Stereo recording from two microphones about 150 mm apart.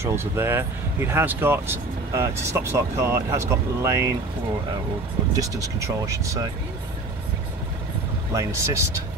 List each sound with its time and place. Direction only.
0.0 s speech: 15° right (ahead or behind)
5.3 s speech: 20° right (ahead or behind)
8.3 s speech: 20° right (ahead or behind)